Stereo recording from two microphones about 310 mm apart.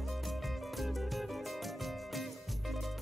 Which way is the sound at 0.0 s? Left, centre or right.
Centre.